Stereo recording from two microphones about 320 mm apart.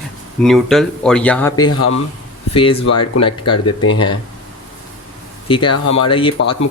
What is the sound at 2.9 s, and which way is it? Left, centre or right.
Speech, left.